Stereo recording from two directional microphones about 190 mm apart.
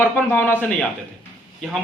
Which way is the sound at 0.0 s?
10° left (ahead or behind).